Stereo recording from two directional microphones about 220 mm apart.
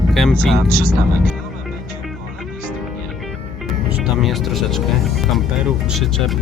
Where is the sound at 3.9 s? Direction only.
Centre (ahead or behind).